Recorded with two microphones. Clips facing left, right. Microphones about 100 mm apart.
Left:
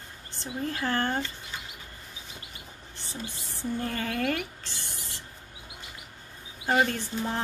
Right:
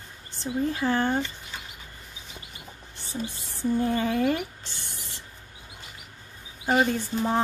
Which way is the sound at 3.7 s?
20° right (ahead or behind).